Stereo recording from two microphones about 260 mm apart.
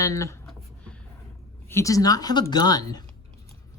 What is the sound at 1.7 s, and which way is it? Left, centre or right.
Speech, centre.